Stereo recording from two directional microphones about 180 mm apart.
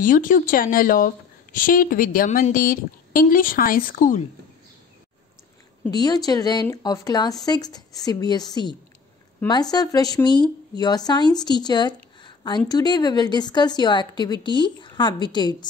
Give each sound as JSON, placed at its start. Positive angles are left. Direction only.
{"t": 0.0, "sound": "a woman's voice", "side_deg": 50}
{"t": 5.9, "sound": "speech", "side_deg": 20}